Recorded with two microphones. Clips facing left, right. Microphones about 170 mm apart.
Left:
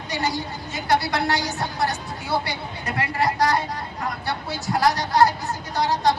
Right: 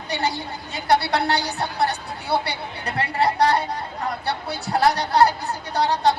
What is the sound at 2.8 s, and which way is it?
Speech, 35° right (ahead or behind).